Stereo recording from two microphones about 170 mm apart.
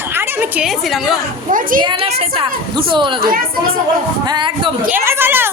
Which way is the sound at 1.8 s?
30° right (ahead or behind).